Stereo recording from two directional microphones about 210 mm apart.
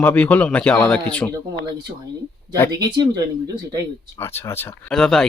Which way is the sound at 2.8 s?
20° right (ahead or behind).